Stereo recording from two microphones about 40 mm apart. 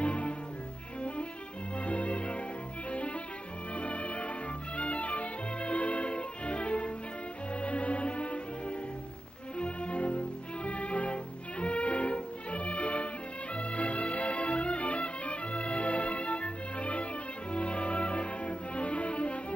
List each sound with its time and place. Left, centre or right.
0.0 s music: left
1.9 s music: left
2.9 s cello: left
3.7 s music: left
9.6 s music: left